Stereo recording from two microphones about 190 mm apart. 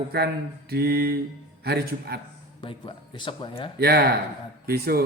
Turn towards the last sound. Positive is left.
turn(degrees=-55)  # may be behind; listen again after turning